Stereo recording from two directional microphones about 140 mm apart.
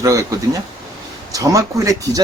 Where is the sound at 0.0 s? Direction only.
25° right (ahead or behind).